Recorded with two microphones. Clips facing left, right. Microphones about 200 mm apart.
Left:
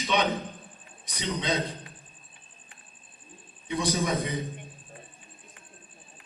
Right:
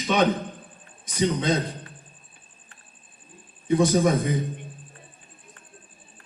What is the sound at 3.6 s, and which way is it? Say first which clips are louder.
Speech: right 8 dB; 50° right (ahead or behind).